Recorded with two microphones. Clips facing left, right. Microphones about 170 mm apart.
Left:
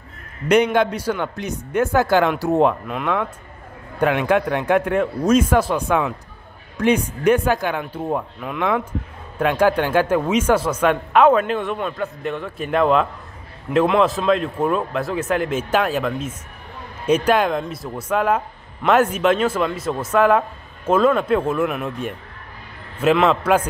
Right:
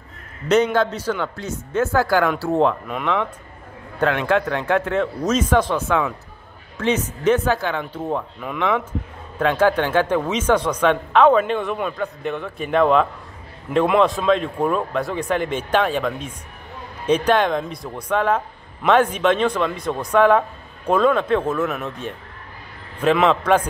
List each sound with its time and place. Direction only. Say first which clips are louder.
0.7 s speech: left 1 dB; 10° left (ahead or behind)
2.9 s speech: even; 5° left (ahead or behind)